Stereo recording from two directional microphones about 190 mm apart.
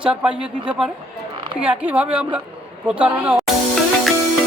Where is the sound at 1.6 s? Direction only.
5° right (ahead or behind).